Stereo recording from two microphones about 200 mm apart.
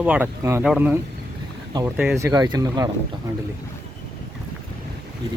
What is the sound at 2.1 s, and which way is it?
Speech, 15° right (ahead or behind).